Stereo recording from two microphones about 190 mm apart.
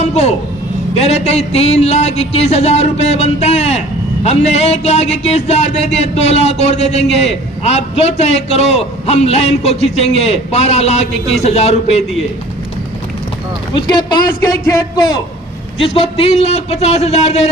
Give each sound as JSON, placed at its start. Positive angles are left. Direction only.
{"t": 0.0, "sound": "speech", "side_deg": 35}
{"t": 13.7, "sound": "a man's voice", "side_deg": 25}
{"t": 15.8, "sound": "speech", "side_deg": 30}